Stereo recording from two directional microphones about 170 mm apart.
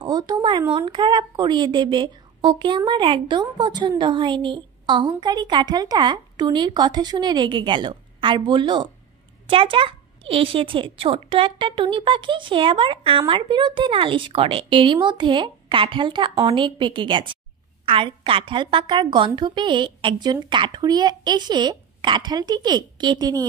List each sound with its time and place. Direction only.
0.0 s a woman's voice: 25° right (ahead or behind)